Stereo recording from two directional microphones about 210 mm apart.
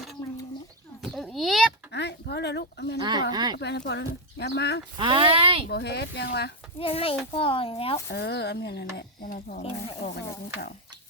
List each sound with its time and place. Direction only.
1.1 s a sound: centre (ahead or behind)
1.9 s a sound: 55° left (ahead or behind)
3.0 s speech: 20° right (ahead or behind)
3.6 s speech: 55° left (ahead or behind)
4.9 s speech: 25° right (ahead or behind)
5.6 s speech: 50° left (ahead or behind)
6.7 s speech: 25° left (ahead or behind)
8.1 s speech: 50° left (ahead or behind)
9.6 s speech: 30° left (ahead or behind)